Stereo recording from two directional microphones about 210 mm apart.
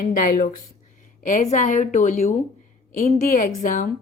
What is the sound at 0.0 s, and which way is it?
A woman's voice, 40° left (ahead or behind).